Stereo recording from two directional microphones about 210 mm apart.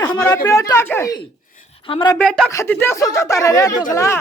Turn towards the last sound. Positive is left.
turn(degrees=15)  # may be behind; listen again after turning